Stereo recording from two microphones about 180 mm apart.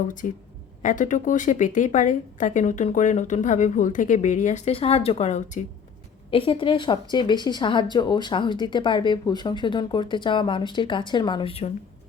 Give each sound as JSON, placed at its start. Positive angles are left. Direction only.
{"t": 0.2, "sound": "speech", "side_deg": 45}
{"t": 6.3, "sound": "a woman's voice", "side_deg": 30}